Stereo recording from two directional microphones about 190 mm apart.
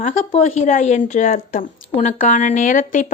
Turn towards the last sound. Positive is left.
turn(degrees=45)  # may be behind; listen again after turning